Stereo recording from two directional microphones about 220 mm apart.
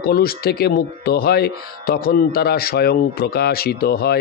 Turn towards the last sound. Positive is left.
turn(degrees=45)  # may be behind; listen again after turning